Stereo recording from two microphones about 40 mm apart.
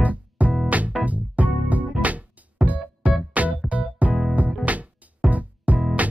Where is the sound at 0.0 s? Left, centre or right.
Right.